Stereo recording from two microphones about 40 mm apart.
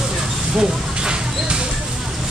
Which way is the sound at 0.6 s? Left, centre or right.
Right.